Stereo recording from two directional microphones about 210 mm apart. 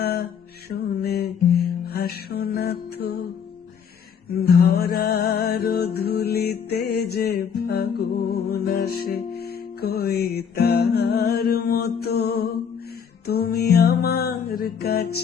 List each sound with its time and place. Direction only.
0.0 s mantra: 50° left (ahead or behind)
0.7 s music: 50° left (ahead or behind)
4.4 s music: 50° left (ahead or behind)